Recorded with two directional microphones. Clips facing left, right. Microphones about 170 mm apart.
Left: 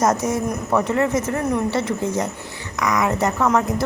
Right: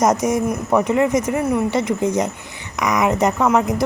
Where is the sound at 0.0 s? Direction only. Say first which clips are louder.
Right 3 dB; 15° right (ahead or behind).